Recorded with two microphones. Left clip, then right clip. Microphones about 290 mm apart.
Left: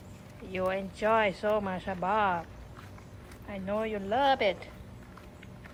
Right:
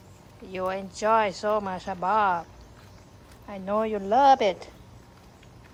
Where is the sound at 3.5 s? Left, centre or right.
Centre.